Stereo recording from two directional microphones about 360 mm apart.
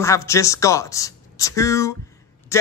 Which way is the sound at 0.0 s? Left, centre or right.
Centre.